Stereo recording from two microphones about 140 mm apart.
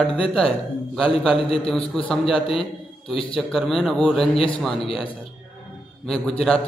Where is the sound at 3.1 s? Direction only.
40° left (ahead or behind).